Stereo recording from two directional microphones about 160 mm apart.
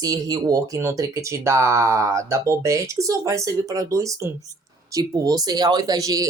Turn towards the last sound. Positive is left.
turn(degrees=-20)  # may be behind; listen again after turning